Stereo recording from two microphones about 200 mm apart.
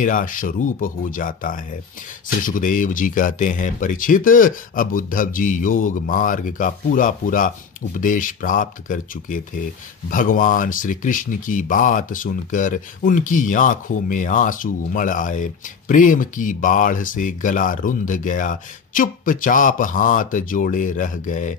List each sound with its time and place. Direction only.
0.0 s speech: 40° left (ahead or behind)